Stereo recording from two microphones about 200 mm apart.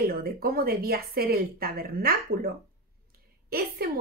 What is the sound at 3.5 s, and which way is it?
Speech, 50° right (ahead or behind).